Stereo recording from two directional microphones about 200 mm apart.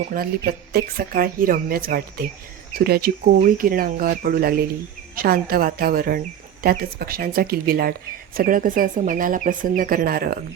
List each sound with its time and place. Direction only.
0.1 s a woman's voice: 50° right (ahead or behind)